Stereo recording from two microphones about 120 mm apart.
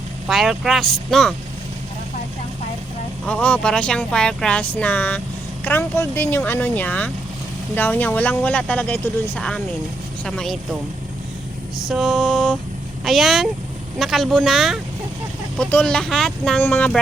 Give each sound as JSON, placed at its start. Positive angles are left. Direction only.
{"t": 0.3, "sound": "speech", "side_deg": 0}
{"t": 3.2, "sound": "speech", "side_deg": 10}
{"t": 11.9, "sound": "speech", "side_deg": 0}
{"t": 16.6, "sound": "speech", "side_deg": 15}